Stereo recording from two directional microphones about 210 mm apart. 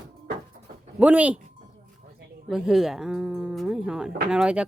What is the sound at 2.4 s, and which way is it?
Speech, centre (ahead or behind).